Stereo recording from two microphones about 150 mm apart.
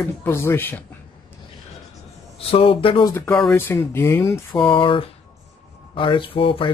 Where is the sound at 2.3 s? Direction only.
35° left (ahead or behind).